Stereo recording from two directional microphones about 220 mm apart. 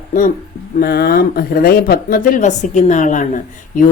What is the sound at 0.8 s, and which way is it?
Speech, 45° left (ahead or behind).